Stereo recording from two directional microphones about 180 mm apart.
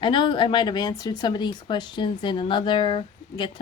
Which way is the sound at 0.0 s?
25° left (ahead or behind).